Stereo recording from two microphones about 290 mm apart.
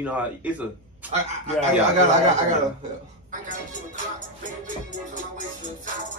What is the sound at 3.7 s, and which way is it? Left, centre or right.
Music, right.